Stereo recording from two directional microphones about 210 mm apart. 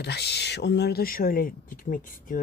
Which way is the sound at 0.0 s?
50° left (ahead or behind).